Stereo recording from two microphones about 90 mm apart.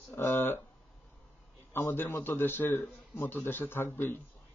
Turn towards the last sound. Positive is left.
turn(degrees=20)  # may be behind; listen again after turning